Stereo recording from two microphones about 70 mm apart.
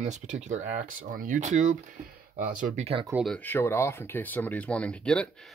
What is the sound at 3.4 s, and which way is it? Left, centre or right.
Speech, left.